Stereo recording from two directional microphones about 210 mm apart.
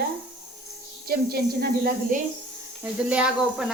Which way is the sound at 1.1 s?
50° right (ahead or behind).